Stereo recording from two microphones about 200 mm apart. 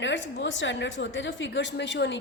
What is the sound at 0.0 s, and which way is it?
A woman's voice, 65° left (ahead or behind).